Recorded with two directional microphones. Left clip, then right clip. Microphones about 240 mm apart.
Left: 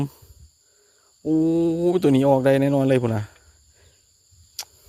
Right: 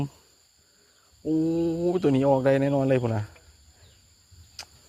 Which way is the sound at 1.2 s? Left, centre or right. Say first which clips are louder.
Left 5 dB; left.